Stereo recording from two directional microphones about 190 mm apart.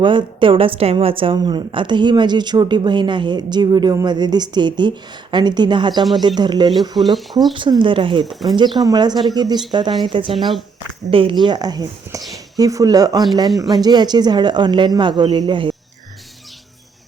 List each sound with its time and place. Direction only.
0.0 s a woman's voice: 25° right (ahead or behind)
7.0 s speech: centre (ahead or behind)
7.5 s a woman's voice: 25° right (ahead or behind)
8.2 s speech: centre (ahead or behind)
8.5 s a woman's voice: 25° right (ahead or behind)